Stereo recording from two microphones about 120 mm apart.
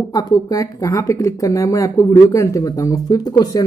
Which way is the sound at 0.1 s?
30° left (ahead or behind).